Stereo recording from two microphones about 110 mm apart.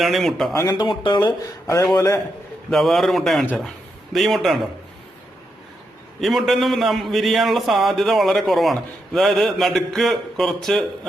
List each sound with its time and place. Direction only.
0.0 s a man's voice: centre (ahead or behind)
0.5 s speech: 25° left (ahead or behind)
0.8 s speech: 45° left (ahead or behind)
1.9 s a man's voice: 30° left (ahead or behind)
2.6 s a man's voice: centre (ahead or behind)
3.4 s speech: 15° left (ahead or behind)
4.1 s a man's voice: centre (ahead or behind)
6.1 s a man's voice: centre (ahead or behind)